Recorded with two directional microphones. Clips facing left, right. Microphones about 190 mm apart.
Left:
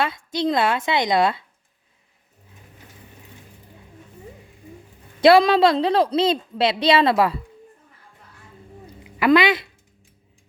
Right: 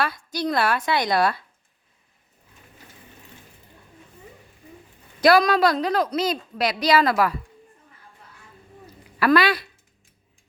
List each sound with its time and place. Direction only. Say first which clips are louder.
0.0 s a woman's voice: left 3 dB; 25° left (ahead or behind)
5.2 s a woman's voice: left 3 dB; 25° left (ahead or behind)
9.0 s speech: left 2 dB; 20° left (ahead or behind)